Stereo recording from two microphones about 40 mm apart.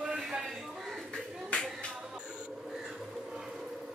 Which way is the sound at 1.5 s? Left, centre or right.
Left.